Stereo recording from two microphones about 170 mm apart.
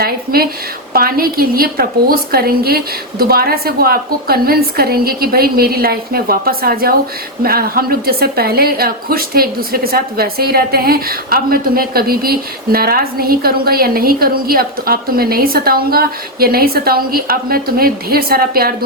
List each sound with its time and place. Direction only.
0.0 s a woman's voice: 60° right (ahead or behind)